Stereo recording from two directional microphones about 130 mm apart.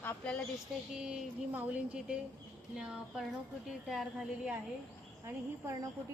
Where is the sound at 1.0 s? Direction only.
5° right (ahead or behind).